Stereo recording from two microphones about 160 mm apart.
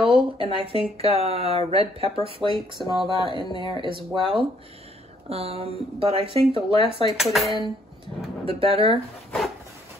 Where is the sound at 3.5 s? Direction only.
30° right (ahead or behind).